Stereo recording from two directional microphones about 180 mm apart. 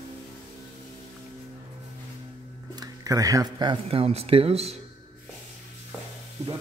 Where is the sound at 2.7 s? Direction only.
20° right (ahead or behind).